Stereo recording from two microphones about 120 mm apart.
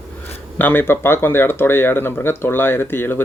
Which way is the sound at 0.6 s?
15° left (ahead or behind).